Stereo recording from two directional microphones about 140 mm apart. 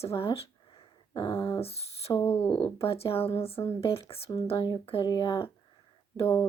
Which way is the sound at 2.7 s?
40° left (ahead or behind).